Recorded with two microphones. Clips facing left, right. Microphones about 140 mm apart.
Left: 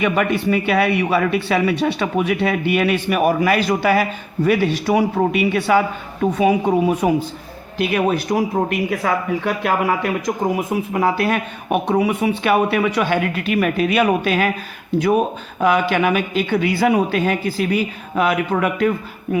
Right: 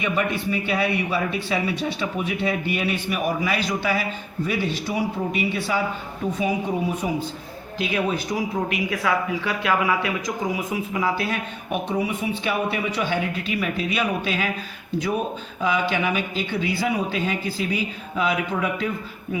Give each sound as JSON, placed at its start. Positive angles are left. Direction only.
{"t": 0.0, "sound": "speech", "side_deg": 70}